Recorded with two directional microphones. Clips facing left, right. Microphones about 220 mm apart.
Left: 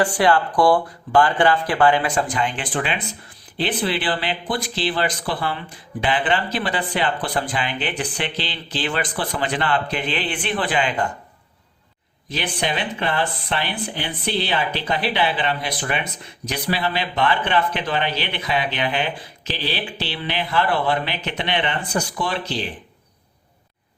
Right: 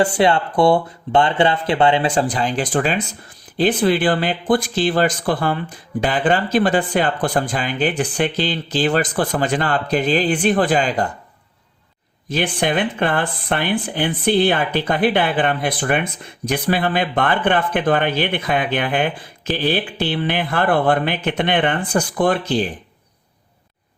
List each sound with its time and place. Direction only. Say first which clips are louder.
0.0 s speech: right 2 dB; 25° right (ahead or behind); by 11.1 s 40° right (ahead or behind)
12.3 s speech: right 6 dB; 50° right (ahead or behind)